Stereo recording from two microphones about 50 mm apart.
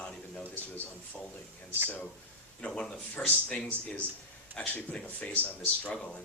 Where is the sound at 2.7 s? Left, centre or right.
Centre.